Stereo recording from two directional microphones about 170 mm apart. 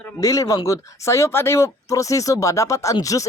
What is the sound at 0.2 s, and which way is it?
Speech, 20° left (ahead or behind).